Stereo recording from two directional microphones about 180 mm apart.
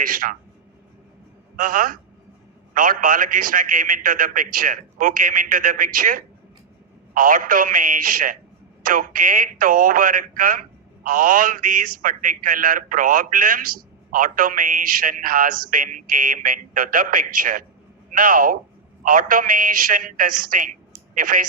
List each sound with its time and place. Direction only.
0.0 s a man's voice: 50° right (ahead or behind)
1.5 s a man's voice: 50° right (ahead or behind)